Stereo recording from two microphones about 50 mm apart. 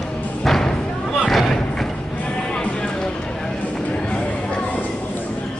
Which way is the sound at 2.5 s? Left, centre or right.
Centre.